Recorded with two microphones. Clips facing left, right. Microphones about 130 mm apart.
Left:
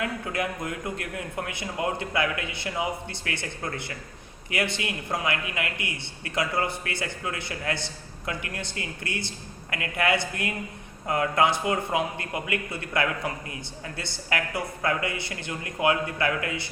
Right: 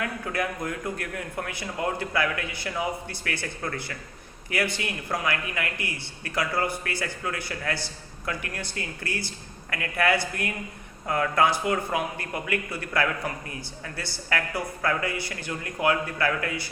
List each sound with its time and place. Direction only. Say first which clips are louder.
0.0 s speech: even; 20° left (ahead or behind)